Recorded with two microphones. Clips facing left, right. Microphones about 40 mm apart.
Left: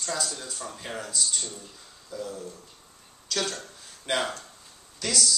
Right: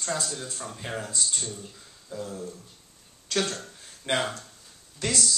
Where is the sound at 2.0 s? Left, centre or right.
Right.